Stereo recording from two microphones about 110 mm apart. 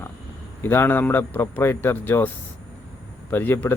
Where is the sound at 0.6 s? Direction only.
20° left (ahead or behind).